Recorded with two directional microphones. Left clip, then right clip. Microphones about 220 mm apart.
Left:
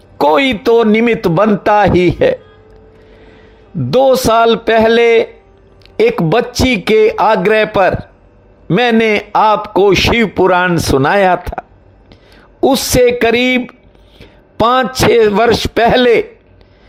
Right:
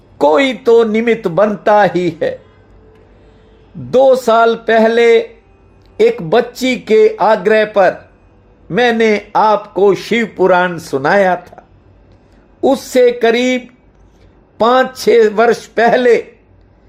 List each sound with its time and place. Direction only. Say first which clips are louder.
0.2 s speech: even; 30° left (ahead or behind)
3.9 s speech: even; 30° left (ahead or behind)